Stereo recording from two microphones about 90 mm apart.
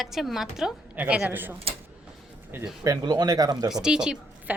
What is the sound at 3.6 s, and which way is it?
Speech, 5° right (ahead or behind).